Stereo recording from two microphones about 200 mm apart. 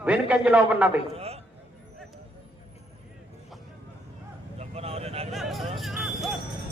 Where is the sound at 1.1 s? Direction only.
30° right (ahead or behind).